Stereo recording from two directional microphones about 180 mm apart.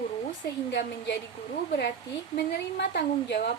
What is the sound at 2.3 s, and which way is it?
A woman's voice, 70° left (ahead or behind).